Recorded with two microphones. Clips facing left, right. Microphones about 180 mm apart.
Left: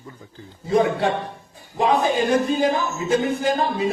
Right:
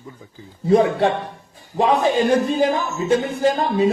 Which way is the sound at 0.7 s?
35° right (ahead or behind).